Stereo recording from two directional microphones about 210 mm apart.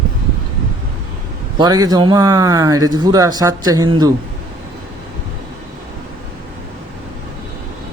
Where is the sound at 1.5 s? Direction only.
20° right (ahead or behind).